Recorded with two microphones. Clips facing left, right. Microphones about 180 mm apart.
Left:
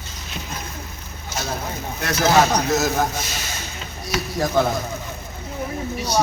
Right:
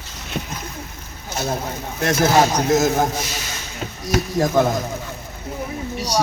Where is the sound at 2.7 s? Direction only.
20° right (ahead or behind).